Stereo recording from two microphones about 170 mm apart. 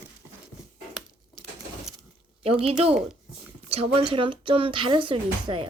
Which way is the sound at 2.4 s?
35° right (ahead or behind).